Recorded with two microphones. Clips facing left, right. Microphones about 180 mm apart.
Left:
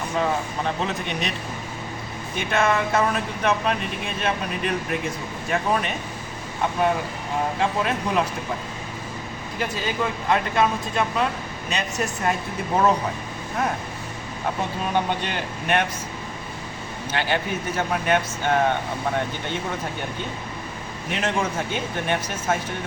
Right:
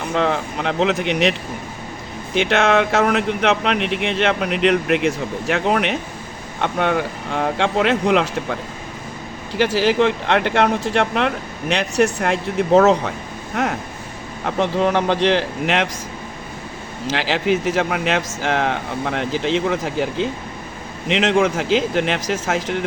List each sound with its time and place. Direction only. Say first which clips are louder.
0.1 s speech: right 5 dB; 85° right
9.6 s speech: right 10 dB; 85° right
17.1 s speech: right 6 dB; 90° right